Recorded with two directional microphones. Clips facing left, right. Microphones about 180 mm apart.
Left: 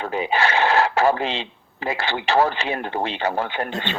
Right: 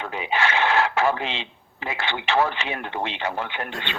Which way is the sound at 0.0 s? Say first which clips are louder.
Left 4 dB; 40° left (ahead or behind).